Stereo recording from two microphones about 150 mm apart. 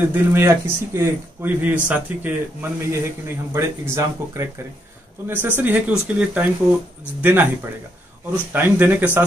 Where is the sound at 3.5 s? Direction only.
20° right (ahead or behind).